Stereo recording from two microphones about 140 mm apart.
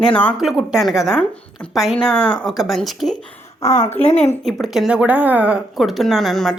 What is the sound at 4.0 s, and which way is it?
Speech, 50° left (ahead or behind).